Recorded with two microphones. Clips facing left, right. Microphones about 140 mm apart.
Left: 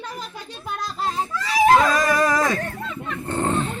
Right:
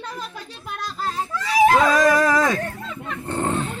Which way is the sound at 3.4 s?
Centre (ahead or behind).